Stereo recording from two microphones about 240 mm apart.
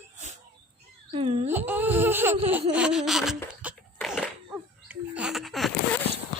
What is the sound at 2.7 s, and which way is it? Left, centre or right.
Laughter, centre.